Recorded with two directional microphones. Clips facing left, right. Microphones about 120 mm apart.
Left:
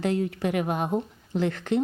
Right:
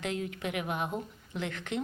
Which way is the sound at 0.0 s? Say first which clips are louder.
Left 9 dB; 35° left (ahead or behind).